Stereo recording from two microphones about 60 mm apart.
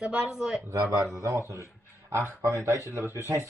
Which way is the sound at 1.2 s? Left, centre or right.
Right.